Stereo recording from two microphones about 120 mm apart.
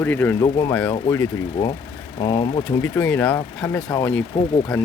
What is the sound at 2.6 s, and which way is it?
Speech, 10° left (ahead or behind).